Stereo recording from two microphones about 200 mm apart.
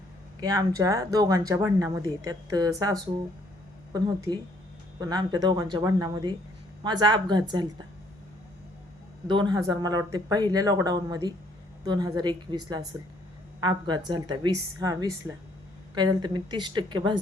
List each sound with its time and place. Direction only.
0.3 s speech: 20° right (ahead or behind)
9.2 s speech: 25° right (ahead or behind)